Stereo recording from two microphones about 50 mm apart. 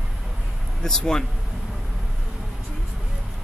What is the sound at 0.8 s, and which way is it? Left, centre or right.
Speech, centre.